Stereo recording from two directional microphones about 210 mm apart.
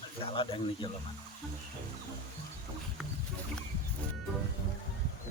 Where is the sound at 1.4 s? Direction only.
Centre (ahead or behind).